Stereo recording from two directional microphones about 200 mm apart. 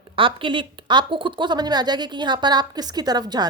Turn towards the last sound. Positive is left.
turn(degrees=-20)  # may be behind; listen again after turning